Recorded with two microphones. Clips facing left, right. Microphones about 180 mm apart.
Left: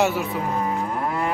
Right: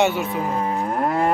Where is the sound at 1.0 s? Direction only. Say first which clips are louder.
Right 7 dB; 50° right (ahead or behind).